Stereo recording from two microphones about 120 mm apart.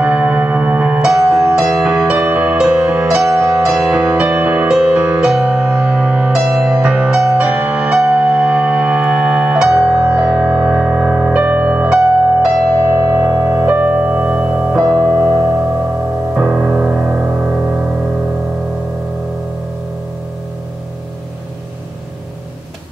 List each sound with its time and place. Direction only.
0.0 s music: 10° right (ahead or behind)
3.3 s music: 20° right (ahead or behind)
3.6 s music: 5° right (ahead or behind)
12.8 s music: 25° right (ahead or behind)
15.0 s keyboard: 10° right (ahead or behind)
16.3 s music: 10° right (ahead or behind)
17.1 s music: 20° right (ahead or behind)
17.4 s music: 5° right (ahead or behind)